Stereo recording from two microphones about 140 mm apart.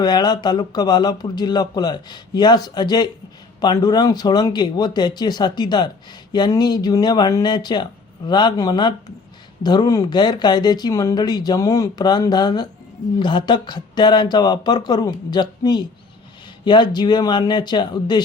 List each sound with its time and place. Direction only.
0.0 s speech: 30° left (ahead or behind)